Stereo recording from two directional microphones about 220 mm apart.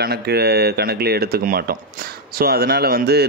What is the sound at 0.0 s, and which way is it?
Speech, 45° right (ahead or behind).